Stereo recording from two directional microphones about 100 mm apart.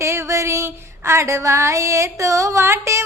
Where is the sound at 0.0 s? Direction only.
30° right (ahead or behind).